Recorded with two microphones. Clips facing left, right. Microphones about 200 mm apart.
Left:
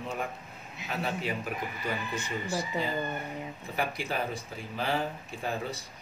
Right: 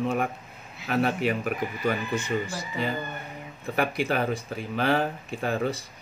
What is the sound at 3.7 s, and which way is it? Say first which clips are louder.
Speech: right 6 dB; 65° right (ahead or behind).